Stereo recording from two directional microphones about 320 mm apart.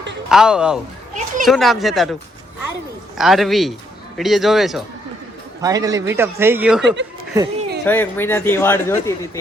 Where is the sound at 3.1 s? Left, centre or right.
Centre.